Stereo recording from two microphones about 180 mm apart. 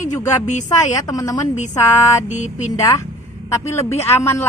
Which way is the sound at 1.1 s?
20° left (ahead or behind).